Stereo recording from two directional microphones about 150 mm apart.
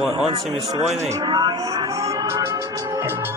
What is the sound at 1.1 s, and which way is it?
Music, 30° right (ahead or behind).